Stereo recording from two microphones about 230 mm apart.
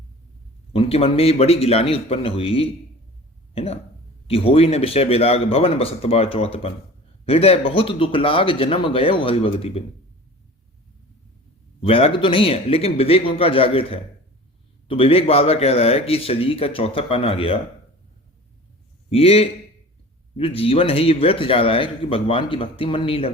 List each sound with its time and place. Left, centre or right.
0.7 s a man's voice: left
11.8 s a man's voice: left
19.1 s a man's voice: left